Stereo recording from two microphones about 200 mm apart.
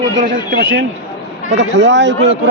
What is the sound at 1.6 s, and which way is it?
Speech, 60° right (ahead or behind).